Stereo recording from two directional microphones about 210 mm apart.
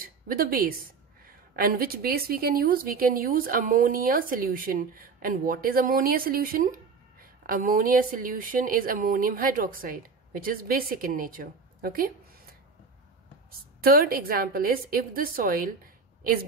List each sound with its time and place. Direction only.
0.0 s a woman's voice: 45° right (ahead or behind)
13.8 s a woman's voice: 45° right (ahead or behind)